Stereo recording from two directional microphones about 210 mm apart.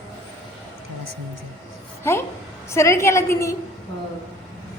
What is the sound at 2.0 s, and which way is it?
A woman's voice, 10° left (ahead or behind).